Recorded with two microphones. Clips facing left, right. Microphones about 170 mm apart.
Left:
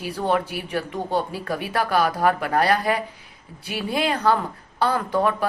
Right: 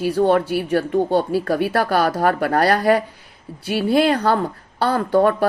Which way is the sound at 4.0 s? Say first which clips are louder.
Right 1 dB; 60° right (ahead or behind).